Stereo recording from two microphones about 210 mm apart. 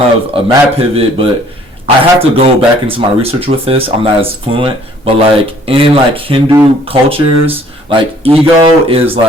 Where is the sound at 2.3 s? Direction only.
25° right (ahead or behind).